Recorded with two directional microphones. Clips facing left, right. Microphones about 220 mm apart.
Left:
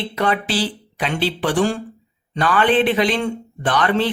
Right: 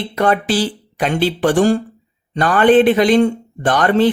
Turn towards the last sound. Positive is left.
turn(degrees=-45)  # may be behind; listen again after turning